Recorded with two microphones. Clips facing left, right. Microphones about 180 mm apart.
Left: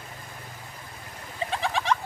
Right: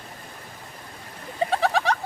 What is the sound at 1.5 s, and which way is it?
Goat, 40° right (ahead or behind).